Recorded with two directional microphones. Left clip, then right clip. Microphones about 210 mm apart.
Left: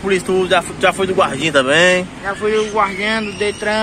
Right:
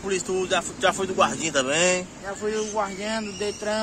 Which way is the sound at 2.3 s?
20° right (ahead or behind).